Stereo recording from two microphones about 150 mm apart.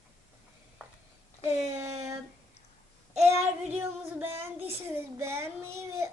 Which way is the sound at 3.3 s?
15° right (ahead or behind).